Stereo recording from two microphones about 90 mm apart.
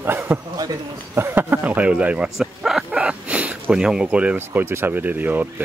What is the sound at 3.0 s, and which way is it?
Dog, 15° right (ahead or behind).